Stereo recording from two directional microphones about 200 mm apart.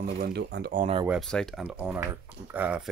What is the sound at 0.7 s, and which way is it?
Speech, 35° right (ahead or behind).